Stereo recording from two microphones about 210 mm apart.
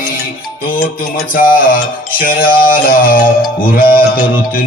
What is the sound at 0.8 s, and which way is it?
Mantra, 40° left (ahead or behind).